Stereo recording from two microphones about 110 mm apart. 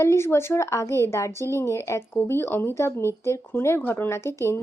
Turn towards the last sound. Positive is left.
turn(degrees=25)  # may be behind; listen again after turning